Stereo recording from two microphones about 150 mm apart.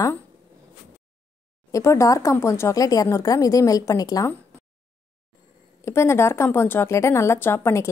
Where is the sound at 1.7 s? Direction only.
20° left (ahead or behind).